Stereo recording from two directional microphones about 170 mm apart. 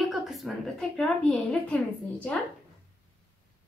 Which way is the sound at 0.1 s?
Centre (ahead or behind).